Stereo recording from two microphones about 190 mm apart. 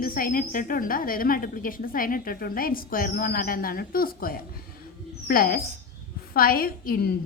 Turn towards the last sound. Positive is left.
turn(degrees=55)  # may be behind; listen again after turning